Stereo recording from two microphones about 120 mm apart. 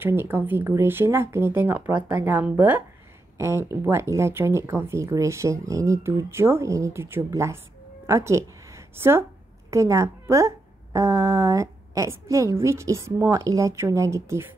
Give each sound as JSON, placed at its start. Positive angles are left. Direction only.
{"t": 0.0, "sound": "a woman's voice", "side_deg": -20}